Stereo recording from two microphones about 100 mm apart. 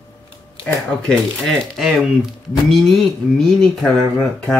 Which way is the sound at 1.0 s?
5° left (ahead or behind).